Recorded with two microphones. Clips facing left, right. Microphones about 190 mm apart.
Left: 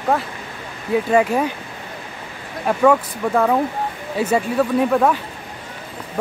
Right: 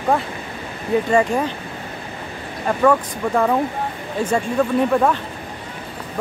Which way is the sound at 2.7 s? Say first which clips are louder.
Left 1 dB; 5° left (ahead or behind).